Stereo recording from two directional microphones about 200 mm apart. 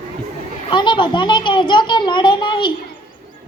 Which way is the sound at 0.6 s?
25° left (ahead or behind).